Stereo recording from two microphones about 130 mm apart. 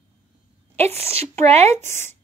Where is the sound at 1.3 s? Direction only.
55° right (ahead or behind).